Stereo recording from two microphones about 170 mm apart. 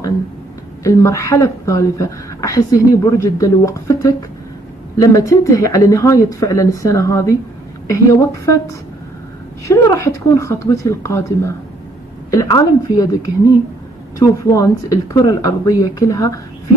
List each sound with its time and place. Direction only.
0.8 s a woman's voice: 20° left (ahead or behind)
9.7 s a woman's voice: 15° left (ahead or behind)